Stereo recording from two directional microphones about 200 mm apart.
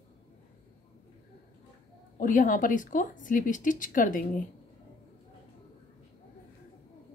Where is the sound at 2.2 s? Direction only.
40° left (ahead or behind).